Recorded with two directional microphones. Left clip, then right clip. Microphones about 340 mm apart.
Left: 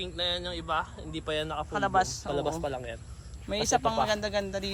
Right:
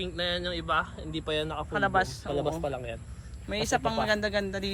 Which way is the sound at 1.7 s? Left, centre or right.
Centre.